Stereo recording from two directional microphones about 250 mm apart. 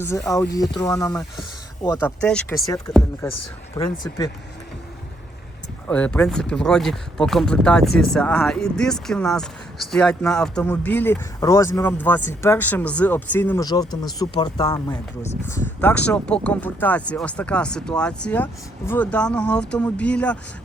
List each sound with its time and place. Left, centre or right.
0.0 s speech: centre
3.8 s speech: centre
5.9 s speech: centre